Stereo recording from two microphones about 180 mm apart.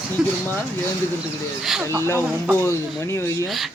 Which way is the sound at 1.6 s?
Centre (ahead or behind).